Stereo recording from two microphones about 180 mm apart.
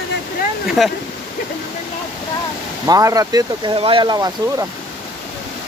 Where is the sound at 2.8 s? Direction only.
20° right (ahead or behind).